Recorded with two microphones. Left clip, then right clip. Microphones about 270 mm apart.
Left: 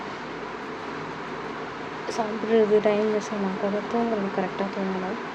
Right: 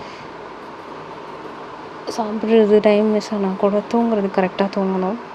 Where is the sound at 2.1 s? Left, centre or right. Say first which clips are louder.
Right 6 dB; right.